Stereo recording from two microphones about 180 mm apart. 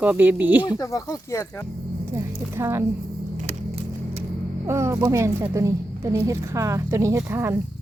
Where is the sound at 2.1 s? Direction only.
15° right (ahead or behind).